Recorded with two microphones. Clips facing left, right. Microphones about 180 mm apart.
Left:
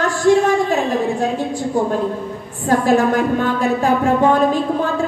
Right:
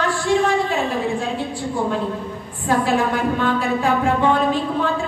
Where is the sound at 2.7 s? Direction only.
45° left (ahead or behind).